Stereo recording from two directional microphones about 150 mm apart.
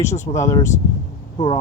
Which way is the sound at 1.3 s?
30° left (ahead or behind).